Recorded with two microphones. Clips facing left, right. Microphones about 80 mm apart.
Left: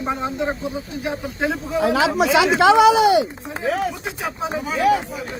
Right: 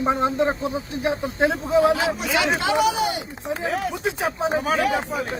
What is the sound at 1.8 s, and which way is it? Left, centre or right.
Speech, left.